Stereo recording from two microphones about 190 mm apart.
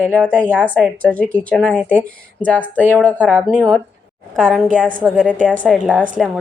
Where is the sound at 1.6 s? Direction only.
5° right (ahead or behind).